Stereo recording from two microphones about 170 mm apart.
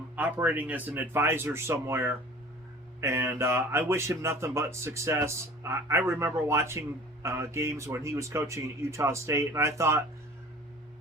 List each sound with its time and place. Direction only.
0.2 s speech: 10° right (ahead or behind)